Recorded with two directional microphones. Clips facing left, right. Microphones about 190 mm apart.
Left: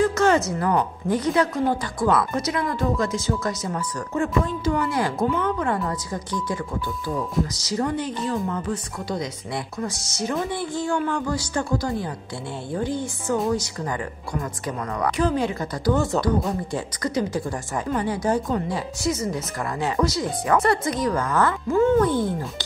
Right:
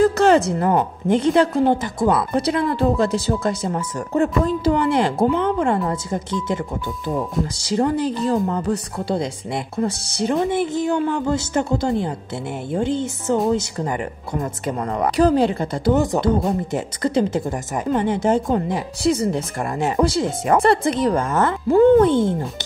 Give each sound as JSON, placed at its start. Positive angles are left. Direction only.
{"t": 0.0, "sound": "a sound", "side_deg": -35}
{"t": 0.6, "sound": "speech", "side_deg": -25}
{"t": 7.6, "sound": "speech", "side_deg": -30}
{"t": 10.5, "sound": "speech", "side_deg": -20}